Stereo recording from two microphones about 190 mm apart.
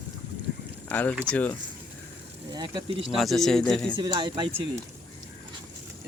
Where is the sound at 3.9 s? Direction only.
25° right (ahead or behind).